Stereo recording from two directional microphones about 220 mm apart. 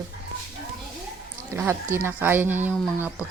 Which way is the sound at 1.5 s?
10° right (ahead or behind).